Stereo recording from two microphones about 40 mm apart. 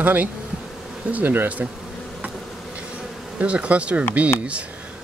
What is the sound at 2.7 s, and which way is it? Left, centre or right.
Insect, right.